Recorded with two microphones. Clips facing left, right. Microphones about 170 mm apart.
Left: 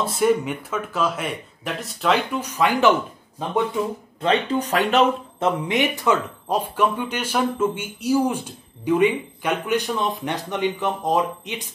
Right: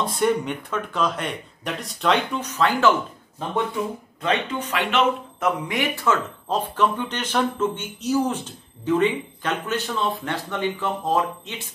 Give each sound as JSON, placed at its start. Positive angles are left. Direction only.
{"t": 0.0, "sound": "speech", "side_deg": 5}
{"t": 4.2, "sound": "speech", "side_deg": 35}
{"t": 5.7, "sound": "speech", "side_deg": 20}